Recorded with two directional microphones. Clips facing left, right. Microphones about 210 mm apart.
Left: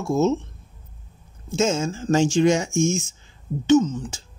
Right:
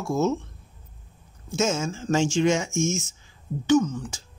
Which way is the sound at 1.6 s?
30° left (ahead or behind).